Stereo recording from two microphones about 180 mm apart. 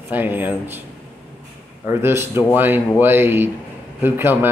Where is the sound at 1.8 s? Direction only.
15° right (ahead or behind).